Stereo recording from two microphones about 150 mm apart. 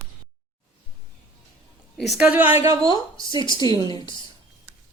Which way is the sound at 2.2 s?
10° right (ahead or behind).